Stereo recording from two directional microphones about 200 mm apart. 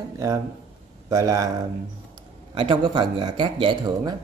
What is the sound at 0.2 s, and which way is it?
Speech, 15° right (ahead or behind).